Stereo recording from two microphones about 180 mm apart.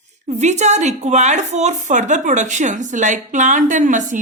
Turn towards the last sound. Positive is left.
turn(degrees=-45)  # may be behind; listen again after turning